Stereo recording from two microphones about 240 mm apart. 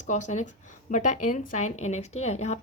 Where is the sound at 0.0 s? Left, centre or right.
Left.